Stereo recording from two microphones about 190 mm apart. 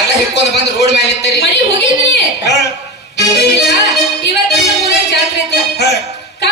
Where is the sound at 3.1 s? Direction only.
60° left (ahead or behind).